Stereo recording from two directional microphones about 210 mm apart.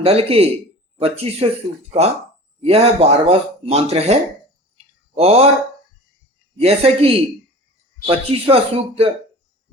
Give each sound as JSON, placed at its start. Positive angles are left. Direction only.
{"t": 0.0, "sound": "speech", "side_deg": -30}
{"t": 2.6, "sound": "speech", "side_deg": -30}
{"t": 6.6, "sound": "speech", "side_deg": -30}